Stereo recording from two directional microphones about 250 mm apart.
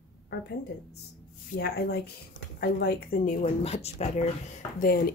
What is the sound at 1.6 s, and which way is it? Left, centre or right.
Speech, left.